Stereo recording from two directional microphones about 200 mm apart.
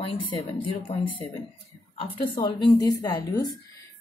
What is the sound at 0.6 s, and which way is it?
Speech, 25° left (ahead or behind).